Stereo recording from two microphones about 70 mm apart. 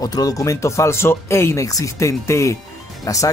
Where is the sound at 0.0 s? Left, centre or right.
Left.